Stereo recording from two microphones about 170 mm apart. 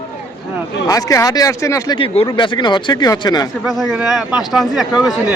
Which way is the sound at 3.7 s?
Centre (ahead or behind).